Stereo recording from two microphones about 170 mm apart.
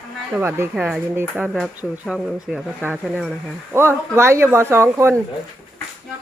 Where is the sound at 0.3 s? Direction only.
15° right (ahead or behind).